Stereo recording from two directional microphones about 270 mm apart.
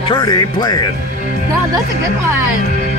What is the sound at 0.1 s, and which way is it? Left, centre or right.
Speech, centre.